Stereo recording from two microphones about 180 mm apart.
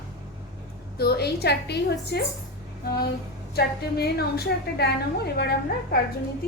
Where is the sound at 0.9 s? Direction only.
60° left (ahead or behind).